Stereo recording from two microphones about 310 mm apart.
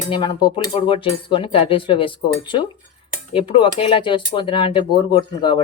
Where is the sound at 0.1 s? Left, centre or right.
Centre.